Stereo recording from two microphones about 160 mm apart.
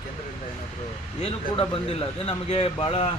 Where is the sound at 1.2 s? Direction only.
35° left (ahead or behind).